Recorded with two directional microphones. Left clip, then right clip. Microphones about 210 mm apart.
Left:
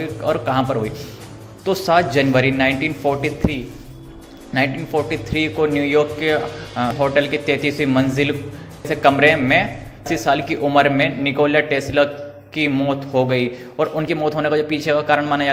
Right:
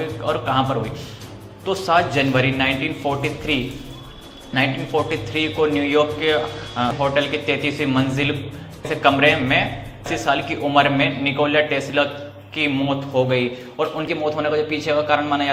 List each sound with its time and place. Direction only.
0.0 s a man's voice: 60° left (ahead or behind)
4.5 s a man's voice: 55° left (ahead or behind)